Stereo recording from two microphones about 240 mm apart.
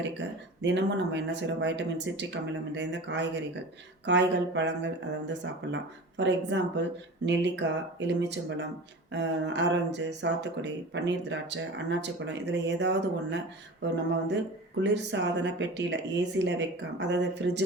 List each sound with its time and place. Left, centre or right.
0.2 s speech: right